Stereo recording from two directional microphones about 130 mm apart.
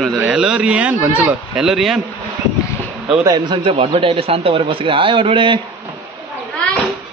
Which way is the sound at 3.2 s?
35° right (ahead or behind).